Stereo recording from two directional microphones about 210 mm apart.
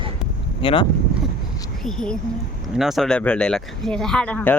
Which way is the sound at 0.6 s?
25° left (ahead or behind).